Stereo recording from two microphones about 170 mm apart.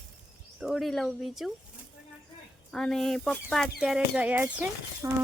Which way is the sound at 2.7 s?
5° left (ahead or behind).